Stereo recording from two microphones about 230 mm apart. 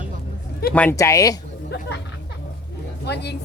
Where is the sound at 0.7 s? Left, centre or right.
Centre.